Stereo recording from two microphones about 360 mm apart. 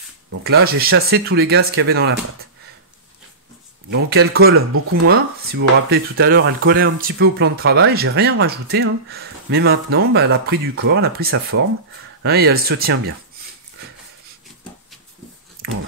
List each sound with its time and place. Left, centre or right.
0.4 s speech: right
3.9 s speech: right